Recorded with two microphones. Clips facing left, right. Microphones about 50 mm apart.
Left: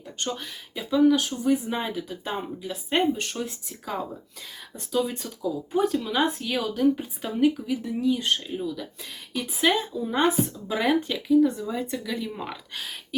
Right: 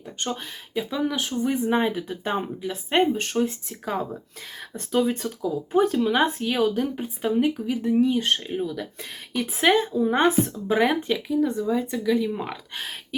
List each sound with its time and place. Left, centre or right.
0.7 s speech: centre
7.7 s speech: right
10.8 s speech: right
11.7 s speech: centre
12.7 s speech: right